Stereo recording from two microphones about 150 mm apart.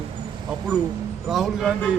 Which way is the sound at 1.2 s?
Centre (ahead or behind).